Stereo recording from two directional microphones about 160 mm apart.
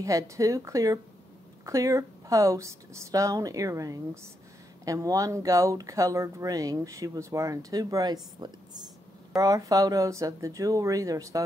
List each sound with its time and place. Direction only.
0.0 s speech: 20° right (ahead or behind)